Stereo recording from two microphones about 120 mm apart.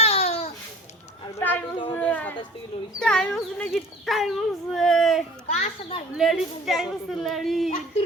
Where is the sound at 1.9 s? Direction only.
15° left (ahead or behind).